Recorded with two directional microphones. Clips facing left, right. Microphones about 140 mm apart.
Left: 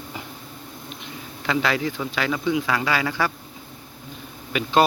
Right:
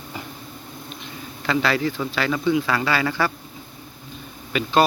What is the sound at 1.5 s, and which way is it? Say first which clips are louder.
Speech: right 2 dB; 15° left (ahead or behind).